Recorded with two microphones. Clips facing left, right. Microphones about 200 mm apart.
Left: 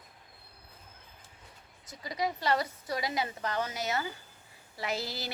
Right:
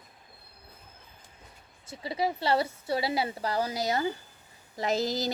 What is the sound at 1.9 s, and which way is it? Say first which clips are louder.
A woman's voice: right 4 dB; 30° right (ahead or behind).